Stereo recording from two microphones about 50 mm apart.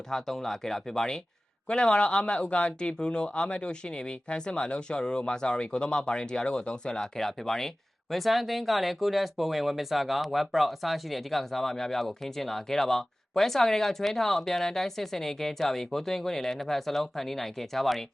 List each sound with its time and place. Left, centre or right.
0.1 s speech: centre